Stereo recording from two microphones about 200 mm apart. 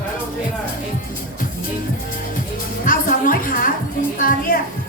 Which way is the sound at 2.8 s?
45° left (ahead or behind).